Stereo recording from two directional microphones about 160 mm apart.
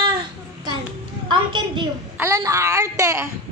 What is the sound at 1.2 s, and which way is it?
Speech, 30° right (ahead or behind).